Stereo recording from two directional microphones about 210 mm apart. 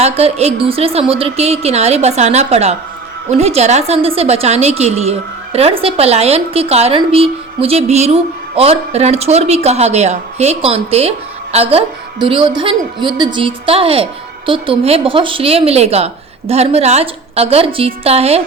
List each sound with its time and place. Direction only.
0.0 s a woman's voice: 30° right (ahead or behind)